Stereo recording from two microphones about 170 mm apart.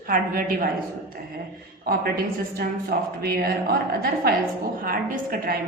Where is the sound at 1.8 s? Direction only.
65° right (ahead or behind).